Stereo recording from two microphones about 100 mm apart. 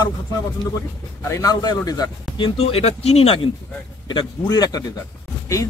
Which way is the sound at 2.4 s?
80° left.